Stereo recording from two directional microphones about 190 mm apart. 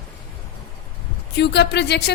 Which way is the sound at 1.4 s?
60° left (ahead or behind).